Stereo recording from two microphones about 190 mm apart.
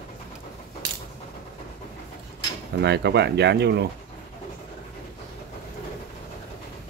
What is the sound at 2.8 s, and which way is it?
Speech, 60° right (ahead or behind).